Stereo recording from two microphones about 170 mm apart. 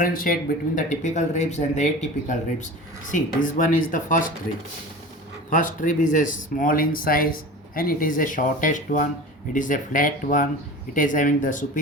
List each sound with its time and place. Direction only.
0.0 s speech: 55° left (ahead or behind)
5.5 s speech: 50° left (ahead or behind)